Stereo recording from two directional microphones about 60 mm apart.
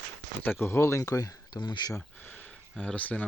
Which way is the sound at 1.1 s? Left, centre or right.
Left.